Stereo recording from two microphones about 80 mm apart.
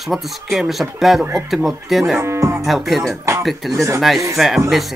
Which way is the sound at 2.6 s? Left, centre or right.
Centre.